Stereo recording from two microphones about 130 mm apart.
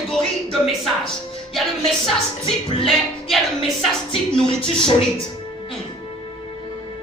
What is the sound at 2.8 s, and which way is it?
Music, centre (ahead or behind).